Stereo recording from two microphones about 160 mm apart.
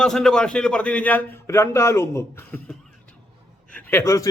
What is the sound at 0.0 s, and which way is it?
A man's voice, 5° left (ahead or behind).